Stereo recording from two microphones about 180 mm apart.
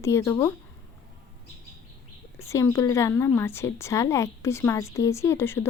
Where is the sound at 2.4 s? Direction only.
15° left (ahead or behind).